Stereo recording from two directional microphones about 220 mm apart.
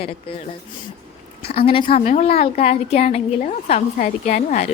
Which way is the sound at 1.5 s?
25° left (ahead or behind).